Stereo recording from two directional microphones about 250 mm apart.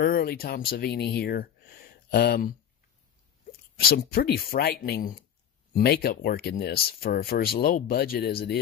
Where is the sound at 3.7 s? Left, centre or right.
Left.